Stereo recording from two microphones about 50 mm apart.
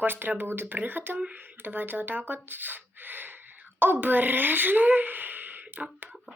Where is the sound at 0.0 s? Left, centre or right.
Right.